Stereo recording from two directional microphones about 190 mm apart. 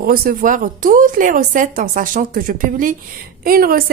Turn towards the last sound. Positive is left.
turn(degrees=-50)  # may be behind; listen again after turning